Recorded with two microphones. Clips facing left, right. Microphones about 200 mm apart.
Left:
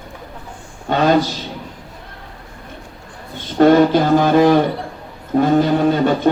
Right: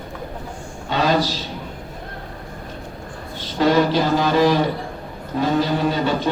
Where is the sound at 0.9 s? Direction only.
55° left (ahead or behind).